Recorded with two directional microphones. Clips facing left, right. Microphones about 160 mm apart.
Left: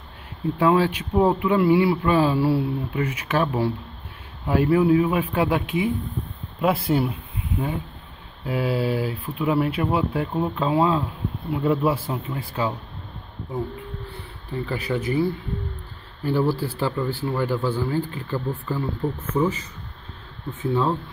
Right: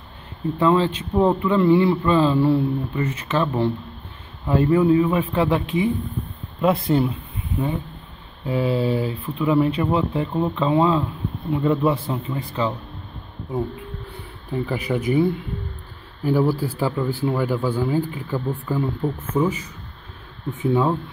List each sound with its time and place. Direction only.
0.6 s a man's voice: 10° left (ahead or behind)
8.5 s speech: 5° left (ahead or behind)
14.7 s speech: 15° right (ahead or behind)
16.3 s speech: 10° right (ahead or behind)